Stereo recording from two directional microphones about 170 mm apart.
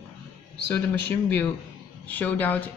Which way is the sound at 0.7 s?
10° left (ahead or behind).